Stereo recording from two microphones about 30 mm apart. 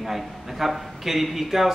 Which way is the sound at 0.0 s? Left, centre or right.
Centre.